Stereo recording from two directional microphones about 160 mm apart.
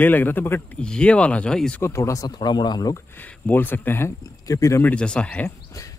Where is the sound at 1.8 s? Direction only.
15° left (ahead or behind).